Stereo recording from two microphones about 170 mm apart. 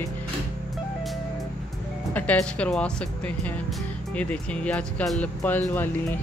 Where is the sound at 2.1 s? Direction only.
10° left (ahead or behind).